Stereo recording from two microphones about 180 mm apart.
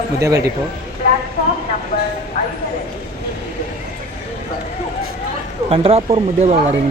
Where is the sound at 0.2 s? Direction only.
20° right (ahead or behind).